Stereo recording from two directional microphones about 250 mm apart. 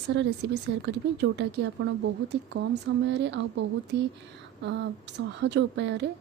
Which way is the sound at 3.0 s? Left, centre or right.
Right.